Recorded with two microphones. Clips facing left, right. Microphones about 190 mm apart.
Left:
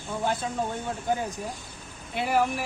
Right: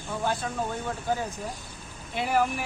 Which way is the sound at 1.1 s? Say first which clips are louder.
Left 1 dB; 15° left (ahead or behind).